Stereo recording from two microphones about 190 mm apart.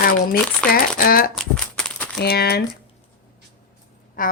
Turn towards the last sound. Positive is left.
turn(degrees=45)  # may be behind; listen again after turning